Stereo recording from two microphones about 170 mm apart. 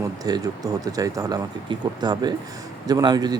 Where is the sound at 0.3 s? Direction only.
25° right (ahead or behind).